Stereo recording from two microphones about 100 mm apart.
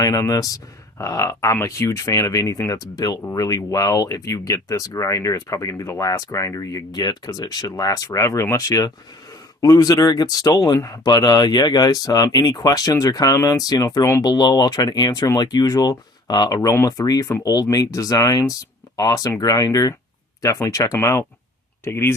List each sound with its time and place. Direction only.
0.0 s speech: 35° left (ahead or behind)
16.6 s speech: 30° left (ahead or behind)